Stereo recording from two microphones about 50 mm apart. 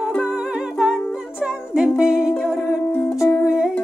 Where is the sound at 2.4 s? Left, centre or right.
Centre.